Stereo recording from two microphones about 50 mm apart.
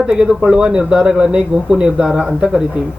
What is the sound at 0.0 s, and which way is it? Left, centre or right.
Speech, centre.